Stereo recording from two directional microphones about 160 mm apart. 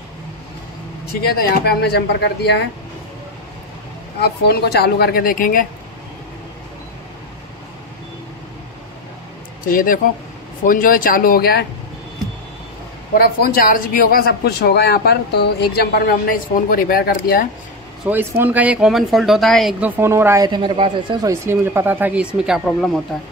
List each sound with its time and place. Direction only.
1.3 s speech: 90° left
4.2 s speech: 85° left; by 5.7 s 60° left (ahead or behind)
9.7 s speech: 60° left (ahead or behind)
13.2 s speech: 70° left (ahead or behind)
18.0 s speech: 10° right (ahead or behind)
19.8 s speech: 15° right (ahead or behind)
20.4 s speech: 30° right (ahead or behind)
21.3 s speech: 15° right (ahead or behind); by 23.0 s centre (ahead or behind)